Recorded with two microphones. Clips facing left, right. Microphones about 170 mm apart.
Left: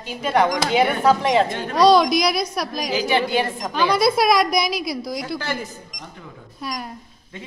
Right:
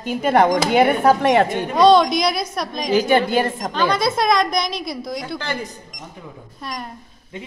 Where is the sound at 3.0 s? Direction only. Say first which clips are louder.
Right 4 dB; 50° right (ahead or behind).